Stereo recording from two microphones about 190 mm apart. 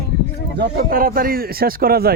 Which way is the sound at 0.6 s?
50° right (ahead or behind).